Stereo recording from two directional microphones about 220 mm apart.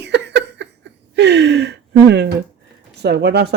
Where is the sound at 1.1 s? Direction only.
50° right (ahead or behind).